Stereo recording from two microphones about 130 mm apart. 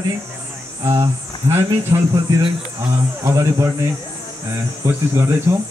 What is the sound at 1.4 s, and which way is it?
Speech, 20° right (ahead or behind).